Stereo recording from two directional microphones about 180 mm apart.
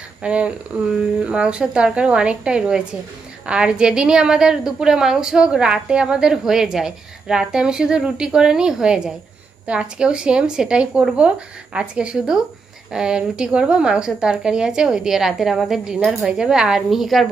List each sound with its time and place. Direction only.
0.2 s a woman's voice: 5° right (ahead or behind)